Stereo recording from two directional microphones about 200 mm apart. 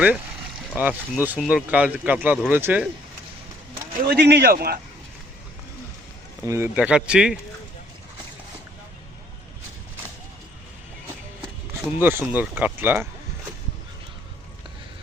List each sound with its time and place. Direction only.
0.8 s speech: 10° right (ahead or behind)
4.0 s speech: 55° right (ahead or behind)
6.4 s speech: 15° right (ahead or behind)
11.9 s speech: 10° right (ahead or behind)